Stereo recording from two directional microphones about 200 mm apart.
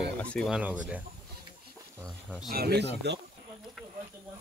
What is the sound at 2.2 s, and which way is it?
Speech, 5° left (ahead or behind).